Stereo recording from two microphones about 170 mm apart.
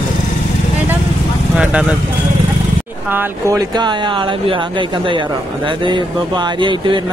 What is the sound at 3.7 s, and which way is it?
Speech, 25° right (ahead or behind).